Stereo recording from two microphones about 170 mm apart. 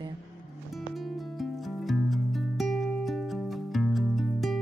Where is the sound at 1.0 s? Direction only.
Centre (ahead or behind).